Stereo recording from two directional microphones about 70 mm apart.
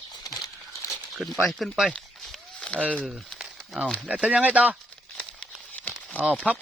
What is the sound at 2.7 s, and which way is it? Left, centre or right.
Speech, centre.